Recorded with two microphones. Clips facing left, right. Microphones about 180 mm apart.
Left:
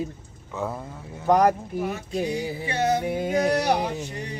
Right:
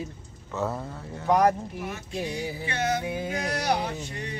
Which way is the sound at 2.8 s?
35° left (ahead or behind).